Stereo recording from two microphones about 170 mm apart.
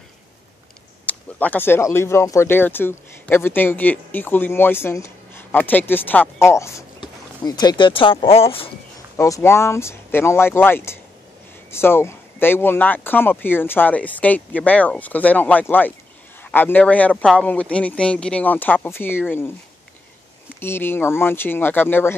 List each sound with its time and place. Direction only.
1.0 s speech: 10° left (ahead or behind); by 8.6 s 35° left (ahead or behind)
9.1 s speech: 15° left (ahead or behind)
20.6 s speech: 15° left (ahead or behind)